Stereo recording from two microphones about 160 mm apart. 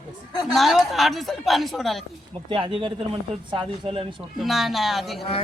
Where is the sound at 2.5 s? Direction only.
35° right (ahead or behind).